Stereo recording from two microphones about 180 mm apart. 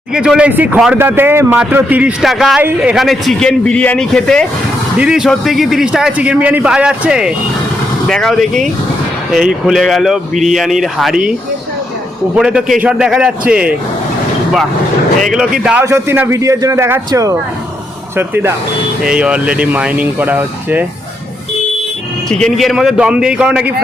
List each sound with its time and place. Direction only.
0.1 s a man's voice: 5° right (ahead or behind)
12.4 s a man's voice: 5° right (ahead or behind)
15.2 s a man's voice: centre (ahead or behind)
22.3 s a man's voice: 5° left (ahead or behind)